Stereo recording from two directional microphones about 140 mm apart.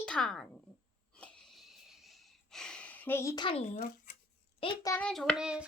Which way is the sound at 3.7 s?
80° left.